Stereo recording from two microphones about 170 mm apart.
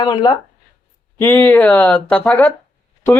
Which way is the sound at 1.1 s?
10° left (ahead or behind).